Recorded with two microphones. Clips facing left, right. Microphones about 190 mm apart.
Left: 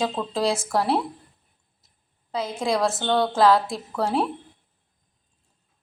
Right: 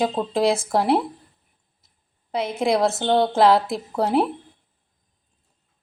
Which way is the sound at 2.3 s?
20° right (ahead or behind).